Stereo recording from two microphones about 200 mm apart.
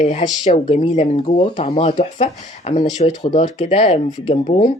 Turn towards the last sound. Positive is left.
turn(degrees=25)  # may be behind; listen again after turning